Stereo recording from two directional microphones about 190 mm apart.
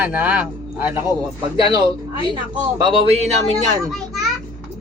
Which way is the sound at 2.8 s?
25° right (ahead or behind).